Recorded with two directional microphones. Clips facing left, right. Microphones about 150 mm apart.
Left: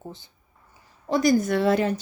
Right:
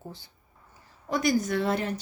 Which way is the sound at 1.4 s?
65° left (ahead or behind).